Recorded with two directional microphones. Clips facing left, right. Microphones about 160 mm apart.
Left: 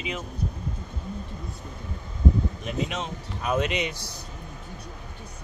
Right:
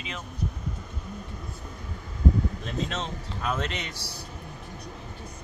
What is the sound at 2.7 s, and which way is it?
Speech, 15° left (ahead or behind).